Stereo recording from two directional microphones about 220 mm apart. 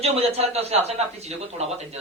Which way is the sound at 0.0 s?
30° right (ahead or behind).